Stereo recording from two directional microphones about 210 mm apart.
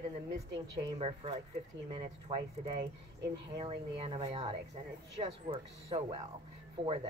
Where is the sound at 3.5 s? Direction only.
25° right (ahead or behind).